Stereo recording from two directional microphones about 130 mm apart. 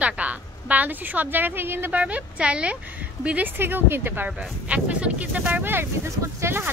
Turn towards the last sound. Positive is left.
turn(degrees=-20)  # may be behind; listen again after turning